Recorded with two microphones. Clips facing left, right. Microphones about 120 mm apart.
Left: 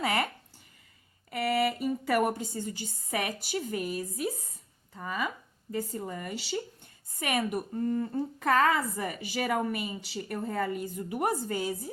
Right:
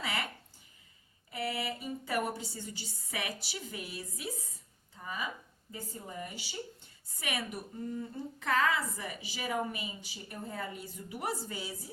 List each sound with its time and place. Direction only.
0.0 s a sound: 50° left (ahead or behind)
1.3 s speech: 60° left (ahead or behind); by 4.4 s 45° left (ahead or behind)
4.9 s speech: 60° left (ahead or behind); by 6.6 s 90° left
7.2 s a woman's voice: 50° left (ahead or behind)